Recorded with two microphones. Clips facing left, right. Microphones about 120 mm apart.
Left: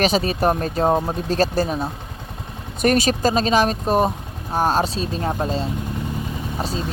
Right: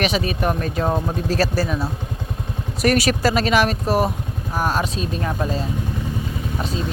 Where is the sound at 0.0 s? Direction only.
30° left (ahead or behind).